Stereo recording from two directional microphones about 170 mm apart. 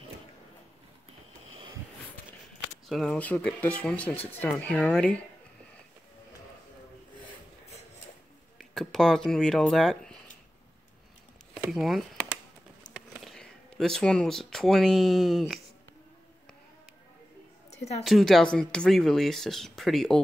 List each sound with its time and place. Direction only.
1.5 s a sound: 30° right (ahead or behind)
2.9 s speech: 5° left (ahead or behind)
8.5 s speech: centre (ahead or behind)
11.7 s speech: centre (ahead or behind)
18.0 s speech: centre (ahead or behind)